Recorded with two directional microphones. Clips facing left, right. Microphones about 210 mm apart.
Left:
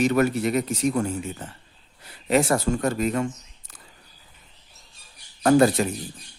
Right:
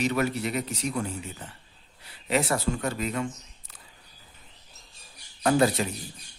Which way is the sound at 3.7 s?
45° left (ahead or behind).